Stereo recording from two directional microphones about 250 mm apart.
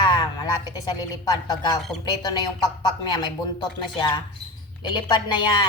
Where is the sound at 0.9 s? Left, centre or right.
Centre.